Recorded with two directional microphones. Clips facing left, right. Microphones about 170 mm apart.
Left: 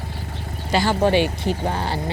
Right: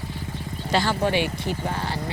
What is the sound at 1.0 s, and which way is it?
Speech, 30° left (ahead or behind).